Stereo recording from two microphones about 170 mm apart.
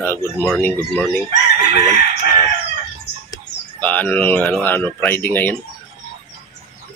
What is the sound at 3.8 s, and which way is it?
Speech, 10° left (ahead or behind).